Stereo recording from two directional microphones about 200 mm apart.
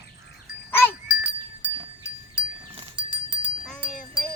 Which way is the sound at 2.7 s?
25° right (ahead or behind).